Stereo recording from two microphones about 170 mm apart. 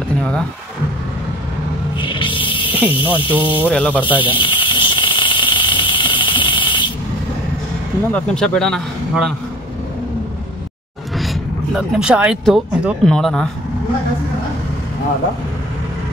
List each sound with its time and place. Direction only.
0.2 s speech: 5° left (ahead or behind)
2.0 s music: 30° left (ahead or behind)
2.7 s snake: 10° right (ahead or behind)
3.0 s speech: 30° left (ahead or behind)
3.3 s speech: 10° right (ahead or behind)
3.6 s speech: 10° left (ahead or behind)
4.0 s a sound: 30° left (ahead or behind)
8.1 s a man's voice: 5° left (ahead or behind)
11.1 s speech: centre (ahead or behind)